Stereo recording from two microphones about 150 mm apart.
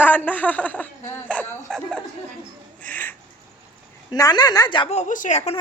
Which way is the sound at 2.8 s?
10° left (ahead or behind).